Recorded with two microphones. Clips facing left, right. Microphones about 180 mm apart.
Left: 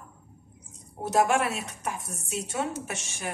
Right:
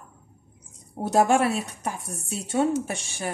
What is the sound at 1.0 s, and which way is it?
Speech, 30° right (ahead or behind).